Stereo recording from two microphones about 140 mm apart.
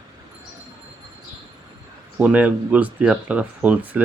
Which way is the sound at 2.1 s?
10° right (ahead or behind).